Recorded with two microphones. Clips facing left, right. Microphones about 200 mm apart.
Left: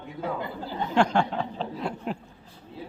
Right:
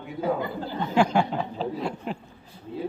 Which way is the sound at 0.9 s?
5° right (ahead or behind).